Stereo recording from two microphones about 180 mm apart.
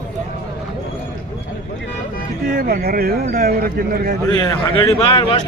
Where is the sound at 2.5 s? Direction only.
55° right (ahead or behind).